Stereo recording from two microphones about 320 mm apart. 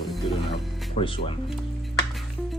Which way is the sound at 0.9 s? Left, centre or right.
Centre.